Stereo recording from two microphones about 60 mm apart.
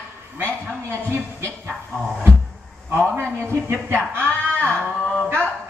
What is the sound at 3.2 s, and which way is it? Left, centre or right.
A man's voice, right.